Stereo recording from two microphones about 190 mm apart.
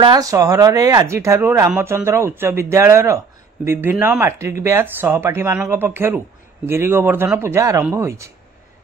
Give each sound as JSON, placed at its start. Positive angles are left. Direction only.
{"t": 0.0, "sound": "speech", "side_deg": -20}